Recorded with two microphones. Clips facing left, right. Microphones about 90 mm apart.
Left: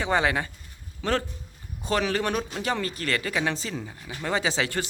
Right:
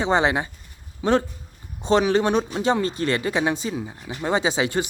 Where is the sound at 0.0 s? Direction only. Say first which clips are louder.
Right 4 dB; 20° right (ahead or behind).